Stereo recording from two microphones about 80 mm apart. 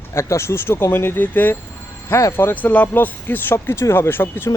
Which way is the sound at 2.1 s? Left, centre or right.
Left.